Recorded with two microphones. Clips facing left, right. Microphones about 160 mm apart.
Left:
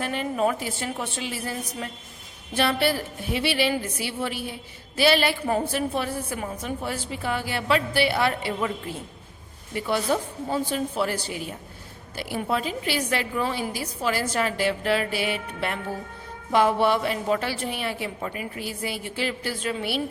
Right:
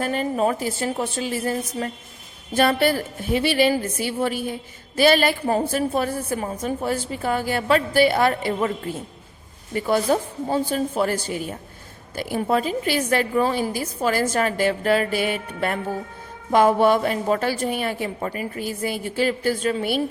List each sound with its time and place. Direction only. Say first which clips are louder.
0.0 s a woman's voice: right 3 dB; 40° right (ahead or behind)
9.7 s a woman's voice: right 4 dB; 45° right (ahead or behind)